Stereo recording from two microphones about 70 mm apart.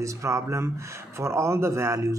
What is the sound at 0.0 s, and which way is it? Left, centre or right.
Speech, right.